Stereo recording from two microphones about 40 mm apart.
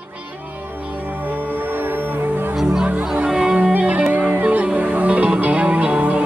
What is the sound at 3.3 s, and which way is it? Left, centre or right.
Music, centre.